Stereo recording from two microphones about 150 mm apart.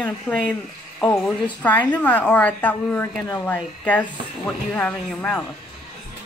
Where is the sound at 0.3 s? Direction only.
10° left (ahead or behind).